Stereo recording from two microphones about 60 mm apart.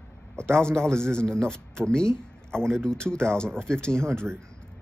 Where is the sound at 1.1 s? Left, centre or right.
Centre.